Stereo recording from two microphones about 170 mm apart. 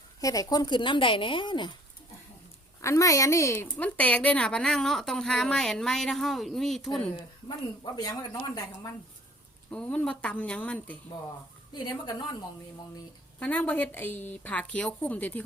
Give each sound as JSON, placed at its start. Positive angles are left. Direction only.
{"t": 0.2, "sound": "speech", "side_deg": 20}
{"t": 2.8, "sound": "a woman's voice", "side_deg": 20}
{"t": 7.9, "sound": "speech", "side_deg": 20}
{"t": 9.6, "sound": "a woman's voice", "side_deg": 5}
{"t": 11.7, "sound": "speech", "side_deg": 25}
{"t": 13.4, "sound": "a woman's voice", "side_deg": 10}